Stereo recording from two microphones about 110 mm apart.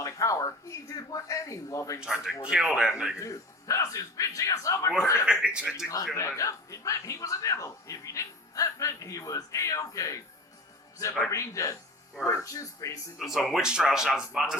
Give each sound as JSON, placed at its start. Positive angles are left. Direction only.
{"t": 0.0, "sound": "speech", "side_deg": 30}
{"t": 2.0, "sound": "a man's voice", "side_deg": -5}
{"t": 3.2, "sound": "speech", "side_deg": 30}
{"t": 5.2, "sound": "a man's voice", "side_deg": -10}
{"t": 5.7, "sound": "speech", "side_deg": 30}
{"t": 11.3, "sound": "speech", "side_deg": 30}
{"t": 13.1, "sound": "speech", "side_deg": 0}